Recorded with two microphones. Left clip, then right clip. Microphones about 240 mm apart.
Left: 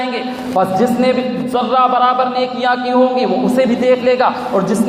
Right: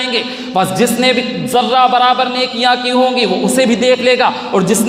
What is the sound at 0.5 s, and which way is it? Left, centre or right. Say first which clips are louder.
A man's voice: even; right.